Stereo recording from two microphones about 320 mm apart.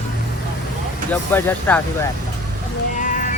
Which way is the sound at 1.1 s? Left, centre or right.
Centre.